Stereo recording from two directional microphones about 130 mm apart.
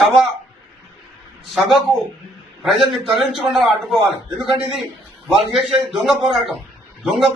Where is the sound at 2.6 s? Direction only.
Centre (ahead or behind).